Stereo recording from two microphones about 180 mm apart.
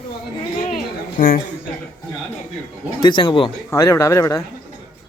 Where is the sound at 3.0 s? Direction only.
25° left (ahead or behind).